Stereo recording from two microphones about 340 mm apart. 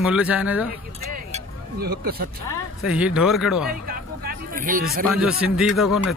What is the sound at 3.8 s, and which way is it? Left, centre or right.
Hubbub, right.